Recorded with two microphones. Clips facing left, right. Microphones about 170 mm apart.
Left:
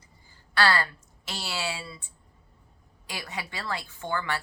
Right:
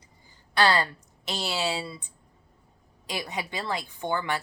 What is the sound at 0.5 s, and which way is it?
A woman's voice, 20° right (ahead or behind).